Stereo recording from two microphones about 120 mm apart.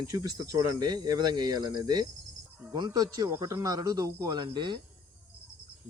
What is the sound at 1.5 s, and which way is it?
Speech, 35° right (ahead or behind).